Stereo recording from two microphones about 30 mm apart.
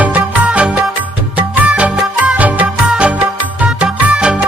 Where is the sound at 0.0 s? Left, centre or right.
Right.